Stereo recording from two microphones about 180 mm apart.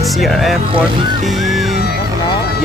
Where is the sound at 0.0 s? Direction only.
Centre (ahead or behind).